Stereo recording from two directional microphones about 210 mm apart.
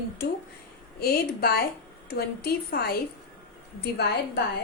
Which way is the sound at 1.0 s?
45° left (ahead or behind).